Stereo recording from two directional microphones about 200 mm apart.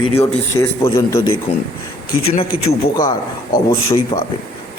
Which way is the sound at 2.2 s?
30° left (ahead or behind).